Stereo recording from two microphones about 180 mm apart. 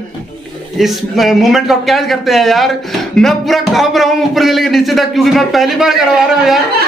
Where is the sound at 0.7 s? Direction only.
Centre (ahead or behind).